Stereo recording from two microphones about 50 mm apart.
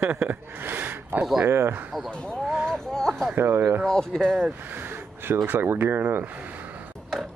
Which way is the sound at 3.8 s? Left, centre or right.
Centre.